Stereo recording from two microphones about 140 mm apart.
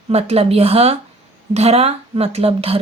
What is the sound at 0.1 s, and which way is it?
A woman's voice, 45° right (ahead or behind).